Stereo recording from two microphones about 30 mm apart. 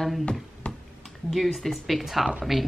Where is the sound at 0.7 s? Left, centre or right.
Left.